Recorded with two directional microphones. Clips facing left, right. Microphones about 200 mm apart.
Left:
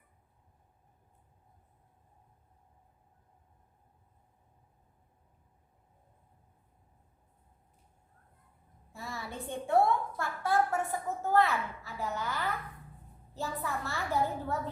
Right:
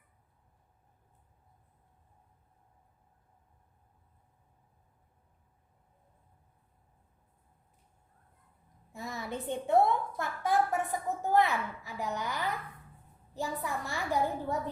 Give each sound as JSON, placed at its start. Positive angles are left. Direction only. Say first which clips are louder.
{"t": 8.9, "sound": "a woman's voice", "louder": "right 3 dB", "side_deg": -20}